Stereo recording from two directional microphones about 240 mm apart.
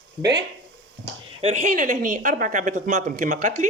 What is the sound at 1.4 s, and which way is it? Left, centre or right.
Speech, right.